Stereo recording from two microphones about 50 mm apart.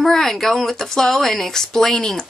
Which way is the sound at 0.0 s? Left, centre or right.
Centre.